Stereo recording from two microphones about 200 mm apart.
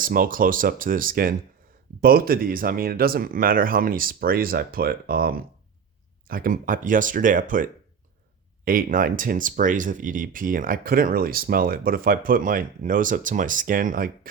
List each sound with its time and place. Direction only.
0.0 s speech: 45° right (ahead or behind)